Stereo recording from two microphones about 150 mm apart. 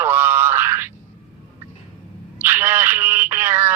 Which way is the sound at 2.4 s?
15° right (ahead or behind).